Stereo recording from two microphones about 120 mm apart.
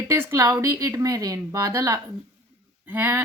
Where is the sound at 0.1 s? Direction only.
25° right (ahead or behind).